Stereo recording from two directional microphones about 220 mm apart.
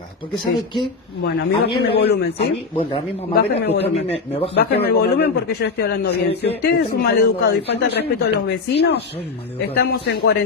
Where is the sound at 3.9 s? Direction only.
25° left (ahead or behind).